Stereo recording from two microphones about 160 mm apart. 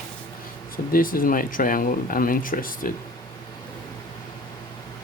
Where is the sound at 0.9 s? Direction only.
60° left (ahead or behind).